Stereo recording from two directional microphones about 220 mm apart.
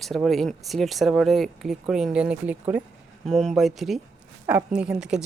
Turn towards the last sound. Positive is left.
turn(degrees=-5)  # may be behind; listen again after turning